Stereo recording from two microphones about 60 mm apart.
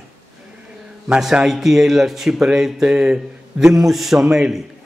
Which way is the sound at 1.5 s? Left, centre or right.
Centre.